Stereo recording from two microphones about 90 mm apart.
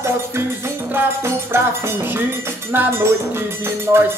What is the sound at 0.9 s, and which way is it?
Music, 30° right (ahead or behind).